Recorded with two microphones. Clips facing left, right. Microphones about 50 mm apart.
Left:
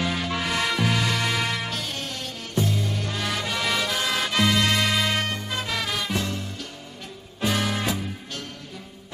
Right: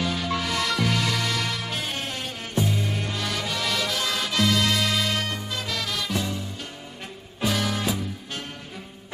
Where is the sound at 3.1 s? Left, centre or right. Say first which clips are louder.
Left 1 dB; centre.